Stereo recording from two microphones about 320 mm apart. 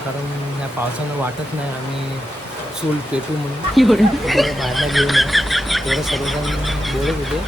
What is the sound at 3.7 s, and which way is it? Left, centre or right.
Speech, centre.